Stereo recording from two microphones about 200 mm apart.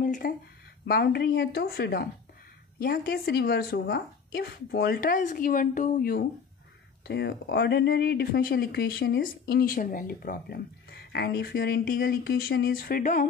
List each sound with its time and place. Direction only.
0.0 s a sound: 45° left (ahead or behind)
0.8 s speech: 50° left (ahead or behind)
7.1 s speech: 60° left (ahead or behind)